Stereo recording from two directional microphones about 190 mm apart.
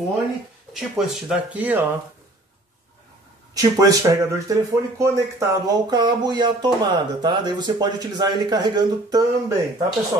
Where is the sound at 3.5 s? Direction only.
20° right (ahead or behind).